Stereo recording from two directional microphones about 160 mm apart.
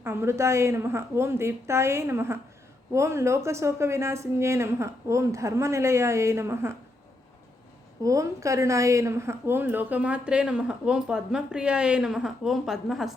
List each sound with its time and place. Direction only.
0.0 s a woman's voice: 15° right (ahead or behind)
8.0 s a woman's voice: 20° right (ahead or behind); by 13.1 s centre (ahead or behind)